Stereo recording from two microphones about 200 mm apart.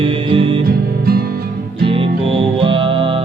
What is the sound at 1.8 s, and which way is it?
Music, 25° right (ahead or behind).